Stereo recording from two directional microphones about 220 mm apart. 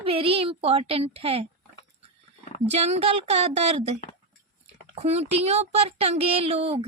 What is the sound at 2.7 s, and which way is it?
Speech, 30° right (ahead or behind).